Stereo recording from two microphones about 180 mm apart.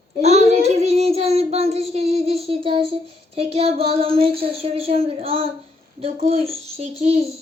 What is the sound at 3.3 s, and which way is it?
Speech, 35° right (ahead or behind).